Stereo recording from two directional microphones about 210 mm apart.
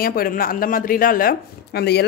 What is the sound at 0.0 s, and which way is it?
Speech, 45° left (ahead or behind).